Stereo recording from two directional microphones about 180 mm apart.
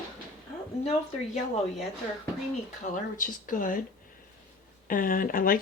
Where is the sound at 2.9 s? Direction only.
45° left (ahead or behind).